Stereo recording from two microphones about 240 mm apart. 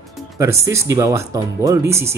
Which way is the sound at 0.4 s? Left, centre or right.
Centre.